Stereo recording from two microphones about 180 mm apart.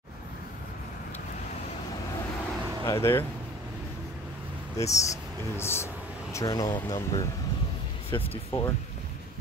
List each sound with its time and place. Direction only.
2.9 s speech: 15° left (ahead or behind)
4.7 s speech: 15° left (ahead or behind)